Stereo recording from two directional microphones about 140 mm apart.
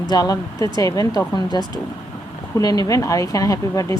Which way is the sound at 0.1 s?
25° left (ahead or behind).